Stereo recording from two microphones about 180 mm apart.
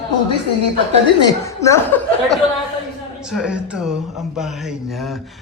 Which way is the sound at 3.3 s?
5° right (ahead or behind).